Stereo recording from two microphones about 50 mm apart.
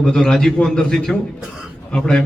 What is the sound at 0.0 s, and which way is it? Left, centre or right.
A man's voice, centre.